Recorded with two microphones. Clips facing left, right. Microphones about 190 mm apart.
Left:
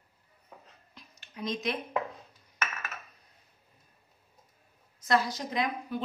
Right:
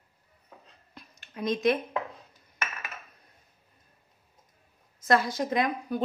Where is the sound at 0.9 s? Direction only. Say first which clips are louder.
Right 4 dB; 55° right (ahead or behind).